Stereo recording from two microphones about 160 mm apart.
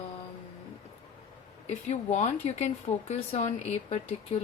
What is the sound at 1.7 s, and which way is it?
Speech, 45° left (ahead or behind).